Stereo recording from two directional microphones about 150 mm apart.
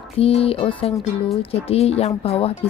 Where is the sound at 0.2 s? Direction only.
40° left (ahead or behind).